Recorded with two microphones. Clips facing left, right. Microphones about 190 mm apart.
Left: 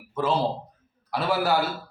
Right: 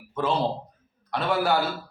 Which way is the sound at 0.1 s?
5° left (ahead or behind).